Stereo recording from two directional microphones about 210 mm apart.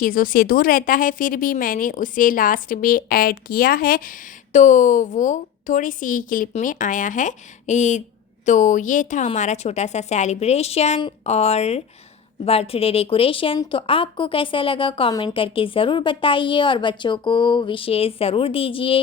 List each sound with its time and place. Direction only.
0.0 s a woman's voice: 40° left (ahead or behind); by 18.9 s 25° left (ahead or behind)